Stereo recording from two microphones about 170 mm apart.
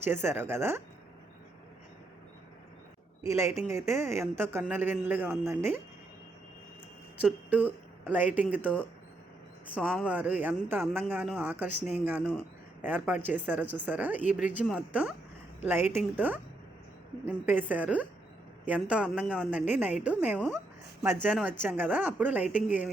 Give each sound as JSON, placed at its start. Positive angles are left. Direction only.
{"t": 0.0, "sound": "a man's voice", "side_deg": -15}
{"t": 3.2, "sound": "a man's voice", "side_deg": -15}
{"t": 7.2, "sound": "a woman's voice", "side_deg": -10}
{"t": 9.8, "sound": "speech", "side_deg": 5}
{"t": 10.1, "sound": "a man's voice", "side_deg": -10}
{"t": 12.2, "sound": "speech", "side_deg": 10}
{"t": 12.8, "sound": "a man's voice", "side_deg": -10}